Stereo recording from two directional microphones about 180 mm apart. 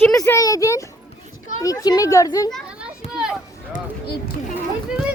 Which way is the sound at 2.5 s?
5° right (ahead or behind).